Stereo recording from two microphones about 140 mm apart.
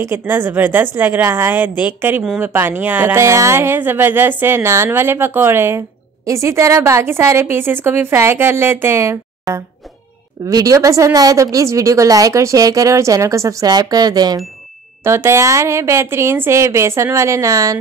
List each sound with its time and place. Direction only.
0.0 s a woman's voice: 15° right (ahead or behind)
15.0 s a woman's voice: 20° right (ahead or behind)